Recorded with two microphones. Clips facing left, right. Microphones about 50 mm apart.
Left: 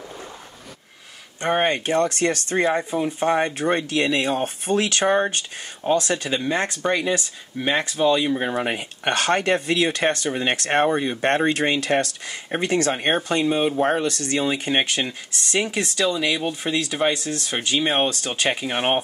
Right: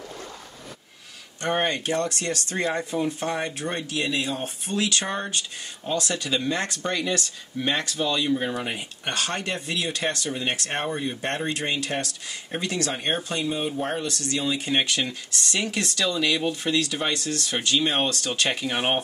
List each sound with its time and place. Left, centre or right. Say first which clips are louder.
1.4 s speech: left 4 dB; left
3.3 s speech: left 7 dB; left
13.9 s speech: left 5 dB; left
14.7 s speech: left 2 dB; left